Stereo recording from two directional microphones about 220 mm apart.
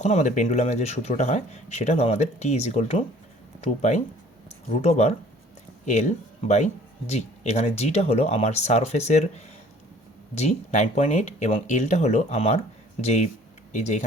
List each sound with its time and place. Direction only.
0.0 s speech: 30° left (ahead or behind)
7.1 s speech: 30° left (ahead or behind)